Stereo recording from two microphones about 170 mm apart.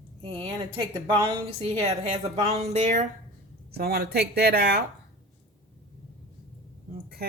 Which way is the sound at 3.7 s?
70° right (ahead or behind).